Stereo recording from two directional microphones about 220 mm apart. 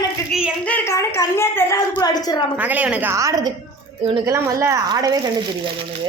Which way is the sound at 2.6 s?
5° right (ahead or behind).